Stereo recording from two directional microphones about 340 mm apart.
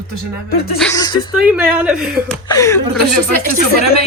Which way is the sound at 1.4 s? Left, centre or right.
Centre.